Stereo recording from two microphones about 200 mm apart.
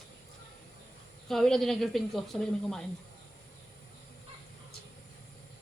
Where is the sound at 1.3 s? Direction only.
Centre (ahead or behind).